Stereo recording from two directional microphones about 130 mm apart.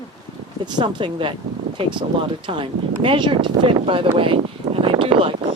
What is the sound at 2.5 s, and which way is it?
Speech, 40° right (ahead or behind).